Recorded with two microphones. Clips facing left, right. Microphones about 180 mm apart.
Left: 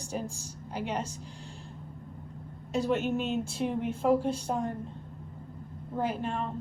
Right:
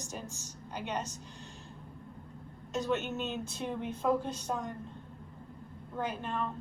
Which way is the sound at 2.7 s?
30° left (ahead or behind).